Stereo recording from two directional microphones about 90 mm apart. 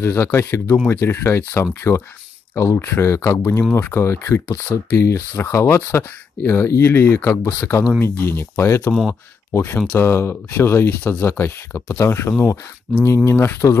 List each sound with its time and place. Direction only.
0.0 s speech: 30° left (ahead or behind)
2.5 s speech: 35° left (ahead or behind)